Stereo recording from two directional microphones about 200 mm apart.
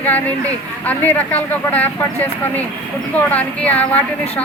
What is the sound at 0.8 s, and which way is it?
A woman's voice, 10° left (ahead or behind).